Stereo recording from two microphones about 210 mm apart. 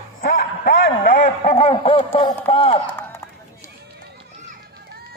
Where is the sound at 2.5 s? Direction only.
25° left (ahead or behind).